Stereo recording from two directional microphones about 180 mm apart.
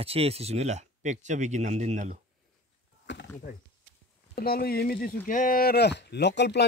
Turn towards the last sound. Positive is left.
turn(degrees=70)  # may be behind; listen again after turning